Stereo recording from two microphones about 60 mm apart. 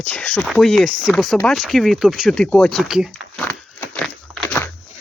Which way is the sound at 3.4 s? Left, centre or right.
Left.